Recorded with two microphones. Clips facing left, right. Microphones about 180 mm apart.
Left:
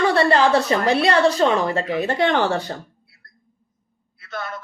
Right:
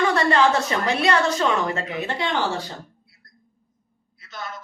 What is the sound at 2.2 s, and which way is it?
Speech, 55° left (ahead or behind).